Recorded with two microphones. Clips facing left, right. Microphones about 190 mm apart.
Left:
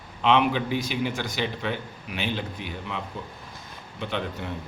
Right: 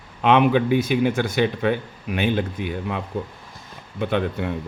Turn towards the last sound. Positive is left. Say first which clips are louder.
# right 8 dB
turn(degrees=-55)  # may be behind; listen again after turning